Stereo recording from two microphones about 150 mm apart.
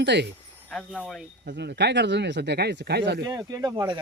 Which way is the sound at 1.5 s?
90° right.